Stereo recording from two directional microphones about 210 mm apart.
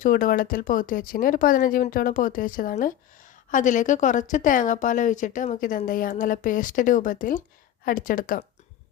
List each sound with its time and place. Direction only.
0.0 s a woman's voice: 40° left (ahead or behind)